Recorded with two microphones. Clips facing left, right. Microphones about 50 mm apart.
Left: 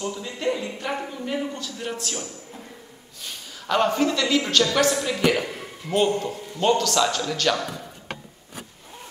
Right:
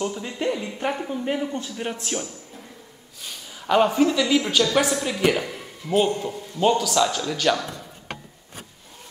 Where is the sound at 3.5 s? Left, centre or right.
Centre.